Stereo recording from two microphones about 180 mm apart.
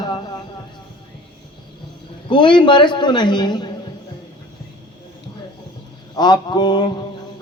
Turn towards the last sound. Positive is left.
turn(degrees=25)  # may be behind; listen again after turning